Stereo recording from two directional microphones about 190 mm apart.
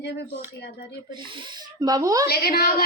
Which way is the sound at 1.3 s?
25° right (ahead or behind).